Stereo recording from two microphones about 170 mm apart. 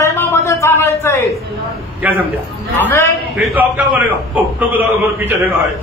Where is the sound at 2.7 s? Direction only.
15° left (ahead or behind).